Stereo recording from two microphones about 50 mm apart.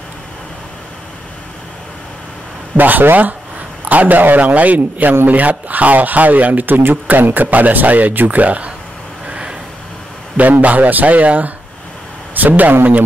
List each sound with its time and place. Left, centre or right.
2.7 s speech: right
9.3 s a sound: centre
10.3 s speech: right